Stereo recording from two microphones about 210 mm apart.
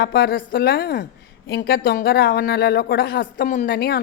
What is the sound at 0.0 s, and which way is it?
A woman's voice, 45° left (ahead or behind).